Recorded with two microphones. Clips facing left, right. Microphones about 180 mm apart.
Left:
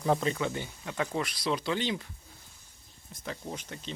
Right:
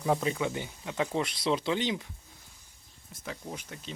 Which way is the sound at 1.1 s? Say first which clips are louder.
Right 3 dB; 25° right (ahead or behind).